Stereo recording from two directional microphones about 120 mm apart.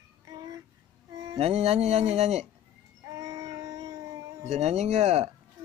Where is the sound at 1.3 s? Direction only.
55° right (ahead or behind).